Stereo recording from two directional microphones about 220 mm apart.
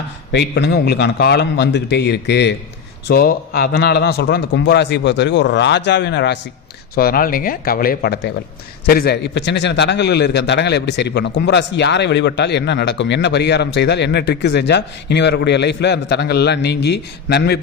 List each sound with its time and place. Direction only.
0.3 s a man's voice: 50° left (ahead or behind)